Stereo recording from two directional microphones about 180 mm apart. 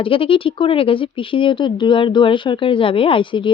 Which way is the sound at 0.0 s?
30° left (ahead or behind).